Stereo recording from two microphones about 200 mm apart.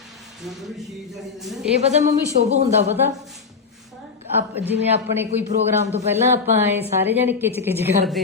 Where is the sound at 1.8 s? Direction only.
35° right (ahead or behind).